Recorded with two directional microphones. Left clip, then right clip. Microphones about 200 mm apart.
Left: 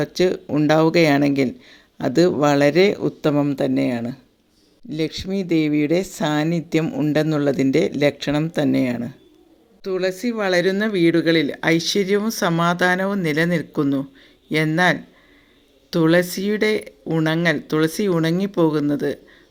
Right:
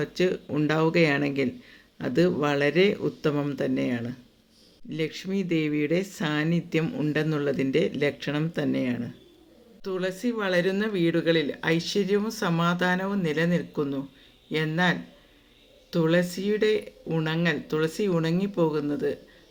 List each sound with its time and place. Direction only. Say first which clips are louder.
0.0 s speech: left 6 dB; 30° left (ahead or behind)